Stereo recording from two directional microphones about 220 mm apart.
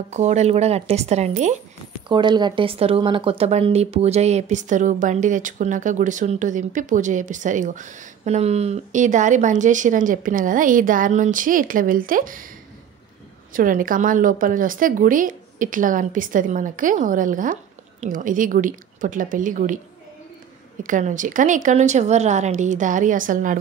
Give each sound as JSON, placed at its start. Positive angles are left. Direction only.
{"t": 0.1, "sound": "speech", "side_deg": -30}
{"t": 2.0, "sound": "speech", "side_deg": -20}
{"t": 13.5, "sound": "speech", "side_deg": -40}
{"t": 20.8, "sound": "speech", "side_deg": -35}